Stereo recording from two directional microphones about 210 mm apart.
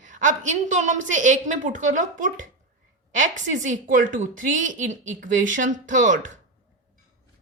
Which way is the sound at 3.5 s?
35° right (ahead or behind).